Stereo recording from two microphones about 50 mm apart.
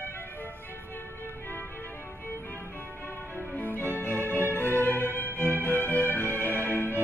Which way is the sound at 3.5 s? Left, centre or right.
Left.